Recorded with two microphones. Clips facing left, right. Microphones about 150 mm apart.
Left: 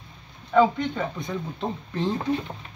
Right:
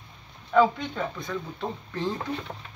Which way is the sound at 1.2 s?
20° left (ahead or behind).